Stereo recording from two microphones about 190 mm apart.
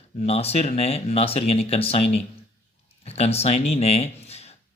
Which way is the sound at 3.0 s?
35° left (ahead or behind).